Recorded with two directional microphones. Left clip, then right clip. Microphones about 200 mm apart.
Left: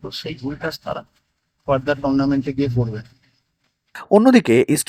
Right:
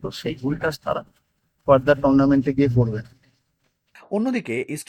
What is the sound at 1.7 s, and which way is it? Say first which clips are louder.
A man's voice: right 3 dB; 35° right (ahead or behind).